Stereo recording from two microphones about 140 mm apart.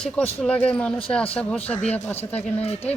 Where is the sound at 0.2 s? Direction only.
10° left (ahead or behind).